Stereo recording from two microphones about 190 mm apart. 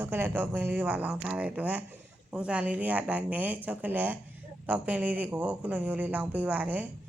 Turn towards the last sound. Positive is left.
turn(degrees=-10)  # may be behind; listen again after turning